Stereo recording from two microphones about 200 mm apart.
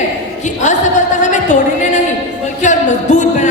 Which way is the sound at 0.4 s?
40° left (ahead or behind).